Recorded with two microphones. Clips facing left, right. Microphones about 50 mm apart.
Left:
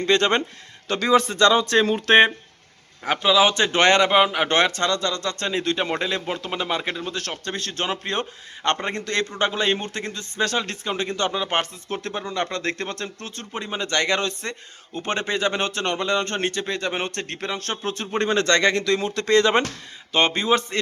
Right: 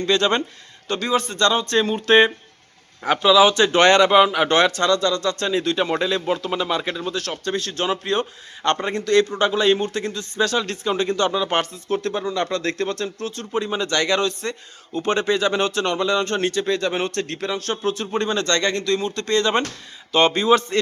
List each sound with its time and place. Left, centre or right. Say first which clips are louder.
0.0 s speech: even; left
0.9 s speech: even; left
1.3 s speech: left 2 dB; left
1.7 s speech: even; left
3.2 s speech: right 4 dB; left
4.4 s speech: right 3 dB; left
7.1 s speech: right 4 dB; left
13.4 s speech: right 5 dB; left
18.2 s speech: left 3 dB; left
20.1 s speech: right 4 dB; left